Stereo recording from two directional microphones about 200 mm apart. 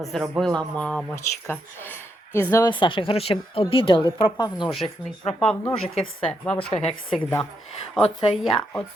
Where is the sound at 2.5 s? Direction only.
20° left (ahead or behind).